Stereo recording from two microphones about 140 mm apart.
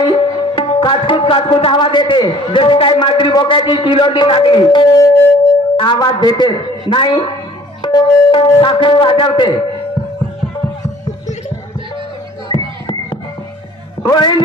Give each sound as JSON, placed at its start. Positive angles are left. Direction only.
{"t": 0.0, "sound": "music", "side_deg": 35}
{"t": 12.4, "sound": "music", "side_deg": 35}